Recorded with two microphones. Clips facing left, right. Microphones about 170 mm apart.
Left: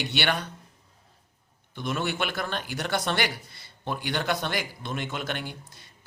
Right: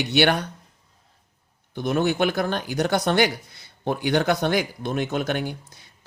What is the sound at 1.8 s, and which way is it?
Speech, 45° right (ahead or behind).